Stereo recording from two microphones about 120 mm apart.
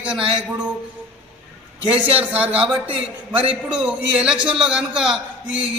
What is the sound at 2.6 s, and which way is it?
Speech, 45° right (ahead or behind).